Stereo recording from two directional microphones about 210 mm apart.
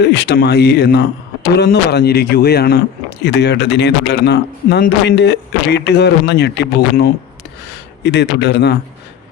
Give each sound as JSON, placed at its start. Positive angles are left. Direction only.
{"t": 0.0, "sound": "speech", "side_deg": 55}